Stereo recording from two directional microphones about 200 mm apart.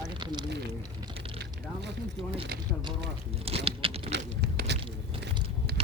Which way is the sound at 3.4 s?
30° right (ahead or behind).